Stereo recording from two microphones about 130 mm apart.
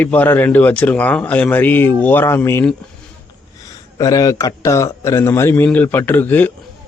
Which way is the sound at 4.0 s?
25° left (ahead or behind).